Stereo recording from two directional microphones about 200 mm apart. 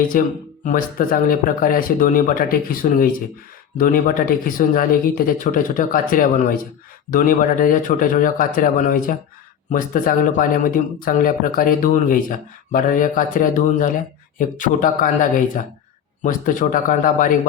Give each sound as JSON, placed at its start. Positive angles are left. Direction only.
{"t": 0.1, "sound": "speech", "side_deg": 45}